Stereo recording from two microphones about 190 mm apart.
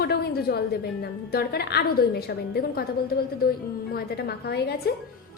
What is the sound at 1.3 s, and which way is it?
A woman's voice, 55° left (ahead or behind).